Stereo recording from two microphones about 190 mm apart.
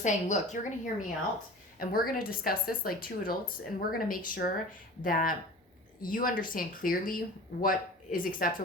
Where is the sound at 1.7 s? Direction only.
50° left (ahead or behind).